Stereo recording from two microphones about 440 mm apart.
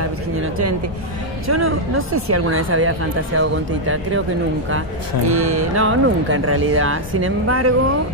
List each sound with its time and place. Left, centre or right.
1.5 s speech: right
5.3 s speech: right